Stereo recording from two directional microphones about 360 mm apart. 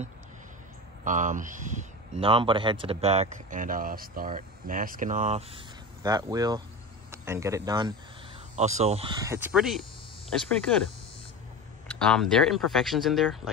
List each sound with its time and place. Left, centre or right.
1.0 s speech: right; by 10.8 s centre
12.0 s speech: centre